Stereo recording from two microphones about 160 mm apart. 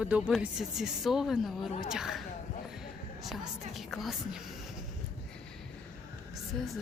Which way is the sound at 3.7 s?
Centre (ahead or behind).